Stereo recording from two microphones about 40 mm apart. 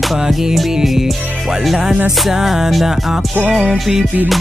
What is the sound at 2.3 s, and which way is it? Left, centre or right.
Music, centre.